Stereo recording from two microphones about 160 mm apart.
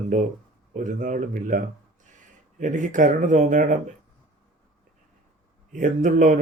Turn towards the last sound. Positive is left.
turn(degrees=-55)  # may be behind; listen again after turning